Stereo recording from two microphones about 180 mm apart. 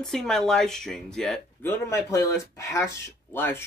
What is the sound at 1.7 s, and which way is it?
Speech, 15° left (ahead or behind).